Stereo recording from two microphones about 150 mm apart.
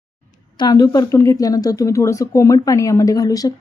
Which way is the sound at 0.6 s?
25° left (ahead or behind).